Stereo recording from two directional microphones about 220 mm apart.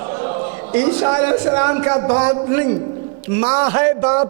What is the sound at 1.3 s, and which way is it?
A man's voice, 25° right (ahead or behind).